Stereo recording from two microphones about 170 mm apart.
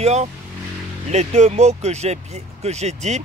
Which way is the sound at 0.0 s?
40° right (ahead or behind).